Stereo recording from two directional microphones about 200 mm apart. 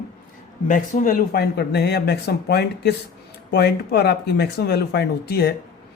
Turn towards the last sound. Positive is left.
turn(degrees=50)  # may be behind; listen again after turning